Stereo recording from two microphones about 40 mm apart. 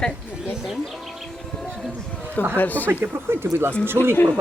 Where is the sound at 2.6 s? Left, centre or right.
Left.